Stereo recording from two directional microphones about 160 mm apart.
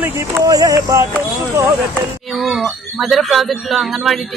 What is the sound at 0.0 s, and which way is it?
Speech, 15° right (ahead or behind).